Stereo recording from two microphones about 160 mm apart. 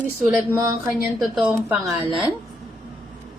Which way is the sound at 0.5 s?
20° right (ahead or behind).